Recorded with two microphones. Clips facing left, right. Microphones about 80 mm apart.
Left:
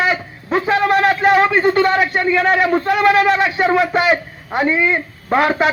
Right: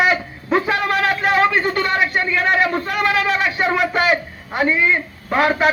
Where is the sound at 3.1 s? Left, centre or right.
Left.